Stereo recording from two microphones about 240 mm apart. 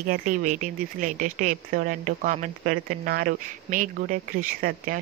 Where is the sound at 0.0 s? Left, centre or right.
Right.